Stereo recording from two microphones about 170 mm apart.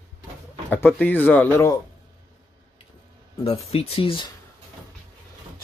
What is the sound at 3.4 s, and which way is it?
Speech, 35° left (ahead or behind).